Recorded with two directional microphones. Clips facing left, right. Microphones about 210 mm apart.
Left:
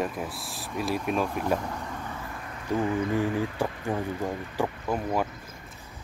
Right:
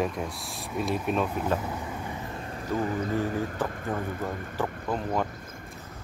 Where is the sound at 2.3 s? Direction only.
30° right (ahead or behind).